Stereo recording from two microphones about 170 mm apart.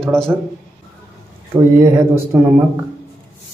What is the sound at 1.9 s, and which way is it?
Speech, 15° right (ahead or behind).